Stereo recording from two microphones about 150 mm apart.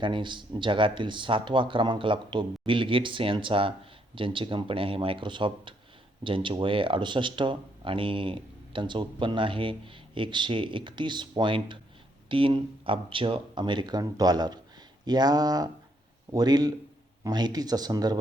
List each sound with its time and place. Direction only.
0.0 s speech: 30° right (ahead or behind)